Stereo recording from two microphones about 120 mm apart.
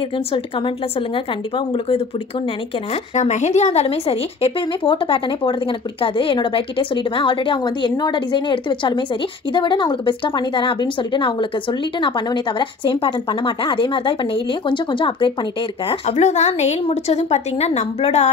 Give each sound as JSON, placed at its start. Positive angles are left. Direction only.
{"t": 0.3, "sound": "speech", "side_deg": 50}
{"t": 2.9, "sound": "speech", "side_deg": 75}
{"t": 15.9, "sound": "speech", "side_deg": 70}